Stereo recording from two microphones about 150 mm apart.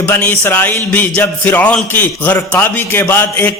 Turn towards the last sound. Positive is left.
turn(degrees=15)  # may be behind; listen again after turning